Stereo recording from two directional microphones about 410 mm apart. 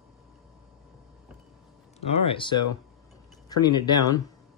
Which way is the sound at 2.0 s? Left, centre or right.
Centre.